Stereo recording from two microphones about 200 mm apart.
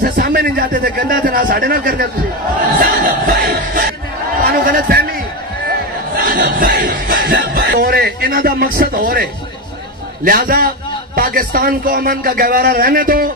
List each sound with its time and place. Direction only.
0.0 s a man's voice: 50° right (ahead or behind)
2.8 s a sound: 45° right (ahead or behind)
10.2 s a man's voice: 45° right (ahead or behind)